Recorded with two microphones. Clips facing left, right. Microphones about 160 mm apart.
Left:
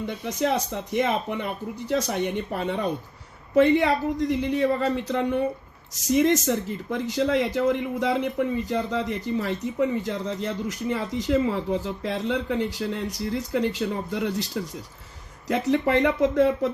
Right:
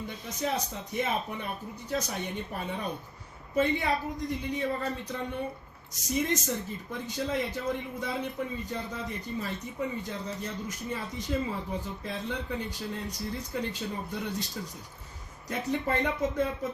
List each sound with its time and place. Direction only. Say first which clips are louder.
0.0 s speech: left 8 dB; 75° left (ahead or behind)